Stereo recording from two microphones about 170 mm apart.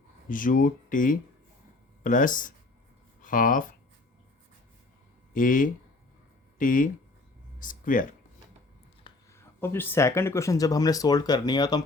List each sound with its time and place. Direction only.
0.3 s speech: 50° left (ahead or behind)
5.3 s speech: 50° left (ahead or behind)
9.3 s speech: 15° left (ahead or behind)